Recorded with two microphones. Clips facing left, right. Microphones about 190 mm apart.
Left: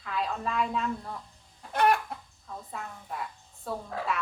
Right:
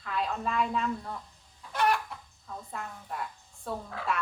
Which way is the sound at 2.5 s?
Centre (ahead or behind).